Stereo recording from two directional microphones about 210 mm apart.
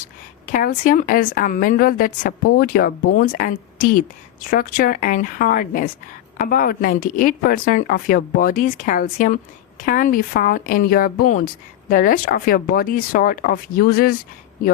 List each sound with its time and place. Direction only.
0.5 s a woman's voice: 40° left (ahead or behind)